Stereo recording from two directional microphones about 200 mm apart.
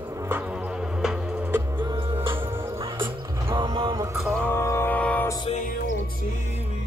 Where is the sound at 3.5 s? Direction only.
25° right (ahead or behind).